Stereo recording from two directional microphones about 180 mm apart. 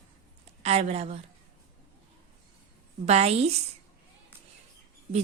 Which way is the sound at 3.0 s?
35° right (ahead or behind).